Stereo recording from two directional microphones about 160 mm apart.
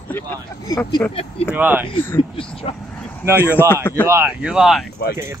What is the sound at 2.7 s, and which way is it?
Vehicle, 35° left (ahead or behind).